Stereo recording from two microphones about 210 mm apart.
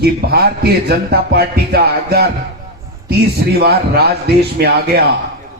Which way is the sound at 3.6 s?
50° right (ahead or behind).